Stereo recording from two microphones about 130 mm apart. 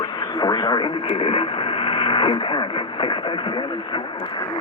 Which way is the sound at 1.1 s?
45° left (ahead or behind).